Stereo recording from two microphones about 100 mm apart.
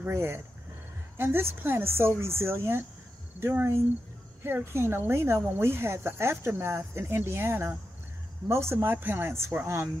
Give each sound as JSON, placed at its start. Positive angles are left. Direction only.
{"t": 0.0, "sound": "speech", "side_deg": -25}